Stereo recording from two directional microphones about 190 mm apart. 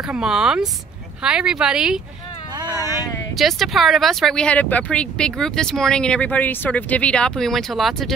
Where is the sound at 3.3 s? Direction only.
Centre (ahead or behind).